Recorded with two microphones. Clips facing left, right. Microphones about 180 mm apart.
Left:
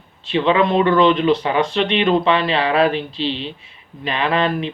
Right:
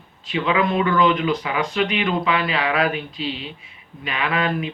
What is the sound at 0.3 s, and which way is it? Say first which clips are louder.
Speech: left 5 dB; 30° left (ahead or behind).